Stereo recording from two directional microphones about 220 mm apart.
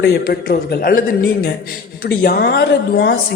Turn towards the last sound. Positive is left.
turn(degrees=45)  # may be behind; listen again after turning